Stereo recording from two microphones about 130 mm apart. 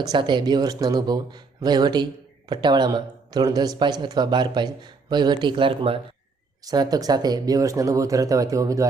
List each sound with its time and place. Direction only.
0.0 s speech: 35° right (ahead or behind)
6.7 s speech: 30° right (ahead or behind)